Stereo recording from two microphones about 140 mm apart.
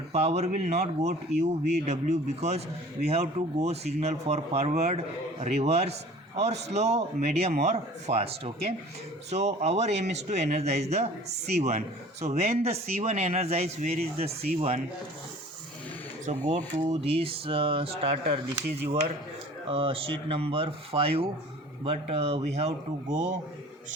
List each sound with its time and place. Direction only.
0.1 s a man's voice: 50° right (ahead or behind)
16.2 s a man's voice: 60° right (ahead or behind); by 18.3 s 40° right (ahead or behind)
19.6 s a man's voice: 40° right (ahead or behind)